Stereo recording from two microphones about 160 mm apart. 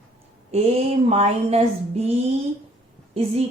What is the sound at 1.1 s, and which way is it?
Speech, 40° right (ahead or behind).